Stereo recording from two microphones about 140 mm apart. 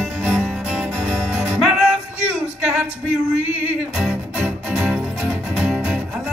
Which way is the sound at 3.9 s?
5° right (ahead or behind).